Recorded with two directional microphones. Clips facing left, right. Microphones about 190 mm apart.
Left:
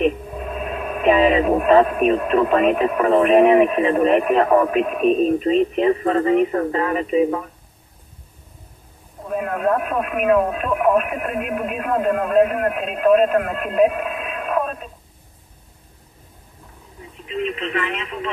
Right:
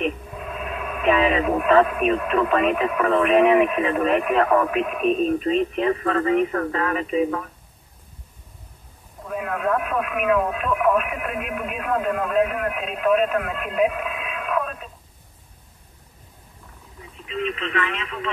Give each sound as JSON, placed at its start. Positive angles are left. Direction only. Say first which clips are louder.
{"t": 0.4, "sound": "speech", "louder": "left 4 dB", "side_deg": 40}
{"t": 9.3, "sound": "speech", "louder": "left 3 dB", "side_deg": 40}
{"t": 17.8, "sound": "speech", "louder": "left 2 dB", "side_deg": 25}